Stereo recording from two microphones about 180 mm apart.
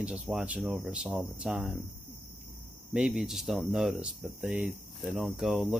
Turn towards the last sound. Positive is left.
turn(degrees=0)  # may be behind; listen again after turning